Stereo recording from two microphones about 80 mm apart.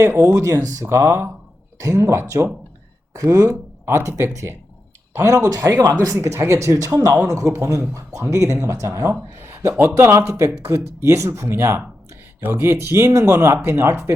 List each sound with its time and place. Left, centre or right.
0.0 s speech: right
5.5 s speech: right